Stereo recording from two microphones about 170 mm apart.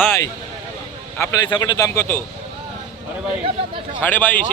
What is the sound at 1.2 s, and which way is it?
Speech, 25° left (ahead or behind).